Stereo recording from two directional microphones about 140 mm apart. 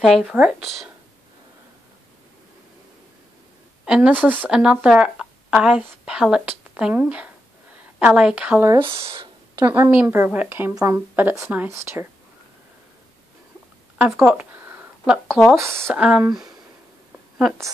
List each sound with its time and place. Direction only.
0.0 s speech: 5° right (ahead or behind)
3.8 s speech: 5° right (ahead or behind)
8.7 s speech: 40° right (ahead or behind)
9.7 s speech: 10° right (ahead or behind)
10.7 s speech: 25° right (ahead or behind)
11.1 s speech: 15° right (ahead or behind)
13.9 s a sound: 10° right (ahead or behind)
15.5 s speech: 20° right (ahead or behind)